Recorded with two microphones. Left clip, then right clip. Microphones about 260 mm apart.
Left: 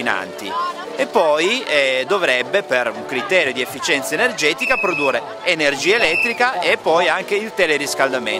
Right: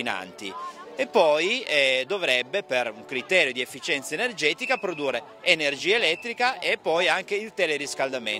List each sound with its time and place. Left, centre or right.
0.9 s speech: right